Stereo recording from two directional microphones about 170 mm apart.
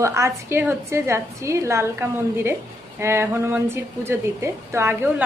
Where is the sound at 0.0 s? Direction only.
15° right (ahead or behind).